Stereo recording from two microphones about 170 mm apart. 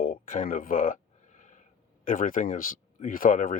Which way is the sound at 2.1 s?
50° left (ahead or behind).